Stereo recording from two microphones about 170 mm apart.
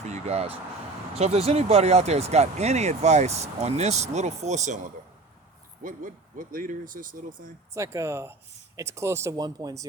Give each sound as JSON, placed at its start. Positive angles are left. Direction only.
{"t": 0.0, "sound": "vehicle", "side_deg": -40}
{"t": 1.1, "sound": "speech", "side_deg": -35}
{"t": 7.7, "sound": "speech", "side_deg": -15}